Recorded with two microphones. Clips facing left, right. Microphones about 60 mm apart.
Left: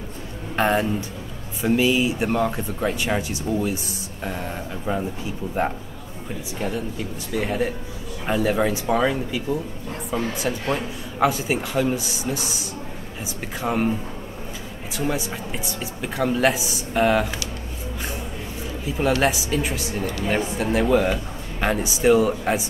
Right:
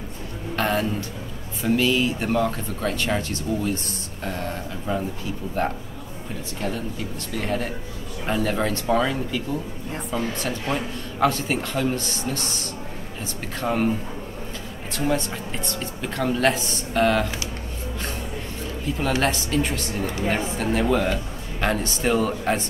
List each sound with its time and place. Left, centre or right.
0.6 s speech: centre
6.6 s speech: centre
15.0 s speech: centre
18.9 s speech: centre